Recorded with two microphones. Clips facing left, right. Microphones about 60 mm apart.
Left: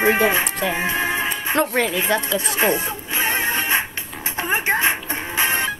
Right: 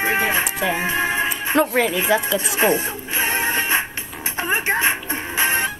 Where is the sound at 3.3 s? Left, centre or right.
Right.